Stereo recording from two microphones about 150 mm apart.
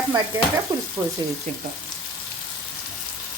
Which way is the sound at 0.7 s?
25° right (ahead or behind).